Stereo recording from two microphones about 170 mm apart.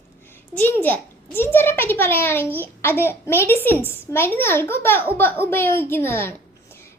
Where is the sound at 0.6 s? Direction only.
10° left (ahead or behind).